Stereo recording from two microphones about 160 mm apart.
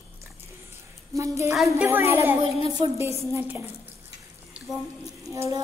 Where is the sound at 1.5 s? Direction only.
Centre (ahead or behind).